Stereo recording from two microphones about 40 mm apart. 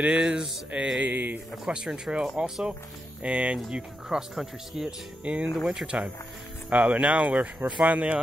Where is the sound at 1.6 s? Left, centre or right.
Right.